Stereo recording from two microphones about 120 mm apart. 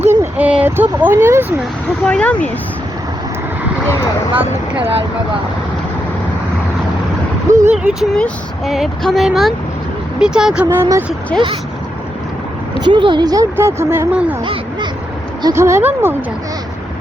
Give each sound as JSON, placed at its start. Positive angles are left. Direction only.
{"t": 0.0, "sound": "a sound", "side_deg": -15}
{"t": 2.0, "sound": "speech", "side_deg": 10}
{"t": 4.4, "sound": "speech", "side_deg": -15}
{"t": 7.5, "sound": "speech", "side_deg": -85}
{"t": 8.1, "sound": "speech", "side_deg": 5}
{"t": 10.7, "sound": "speech", "side_deg": -20}
{"t": 12.8, "sound": "speech", "side_deg": -40}
{"t": 14.1, "sound": "speech", "side_deg": -10}
{"t": 14.4, "sound": "crow", "side_deg": -45}
{"t": 15.5, "sound": "speech", "side_deg": -20}